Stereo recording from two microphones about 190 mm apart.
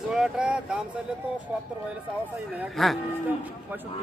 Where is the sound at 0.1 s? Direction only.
5° right (ahead or behind).